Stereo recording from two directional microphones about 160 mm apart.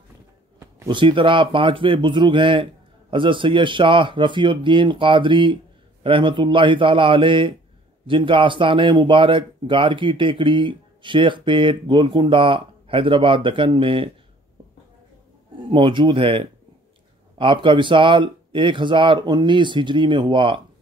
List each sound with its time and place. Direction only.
0.6 s a sound: 20° right (ahead or behind)
0.9 s speech: 30° right (ahead or behind)
15.7 s speech: 30° right (ahead or behind)